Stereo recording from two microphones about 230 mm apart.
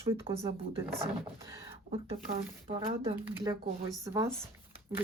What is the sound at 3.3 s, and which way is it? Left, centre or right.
Speech, centre.